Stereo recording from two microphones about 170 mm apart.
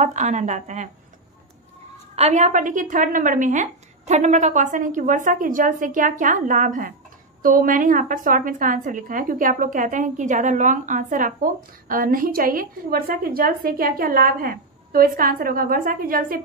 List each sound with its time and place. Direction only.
0.0 s a woman's voice: 45° right (ahead or behind)
2.1 s a woman's voice: 40° right (ahead or behind); by 16.3 s 55° right (ahead or behind)